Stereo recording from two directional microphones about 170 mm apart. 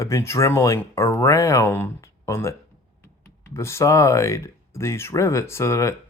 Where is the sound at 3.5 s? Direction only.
15° left (ahead or behind).